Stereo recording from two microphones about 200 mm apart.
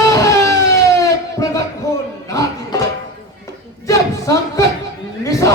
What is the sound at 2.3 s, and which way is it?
Music, 15° left (ahead or behind).